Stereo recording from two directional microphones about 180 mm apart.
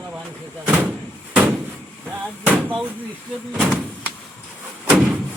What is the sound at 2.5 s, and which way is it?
Speech, 10° right (ahead or behind).